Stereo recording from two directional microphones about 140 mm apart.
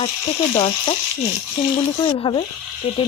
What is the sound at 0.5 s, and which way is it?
Speech, 40° left (ahead or behind).